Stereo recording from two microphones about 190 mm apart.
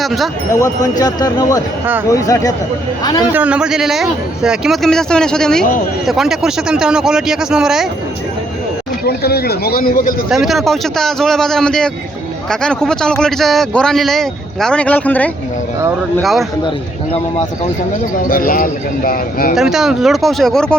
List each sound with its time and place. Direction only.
0.0 s speech: centre (ahead or behind)
0.6 s speech: 20° left (ahead or behind)
3.3 s speech: 5° right (ahead or behind)
9.0 s a man's voice: 55° left (ahead or behind)
10.2 s speech: centre (ahead or behind)
18.2 s a man's voice: 50° left (ahead or behind)
19.5 s speech: centre (ahead or behind)